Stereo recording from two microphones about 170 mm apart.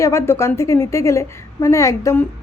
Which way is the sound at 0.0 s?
15° left (ahead or behind).